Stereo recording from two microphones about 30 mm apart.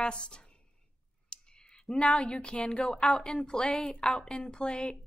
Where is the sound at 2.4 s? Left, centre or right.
Left.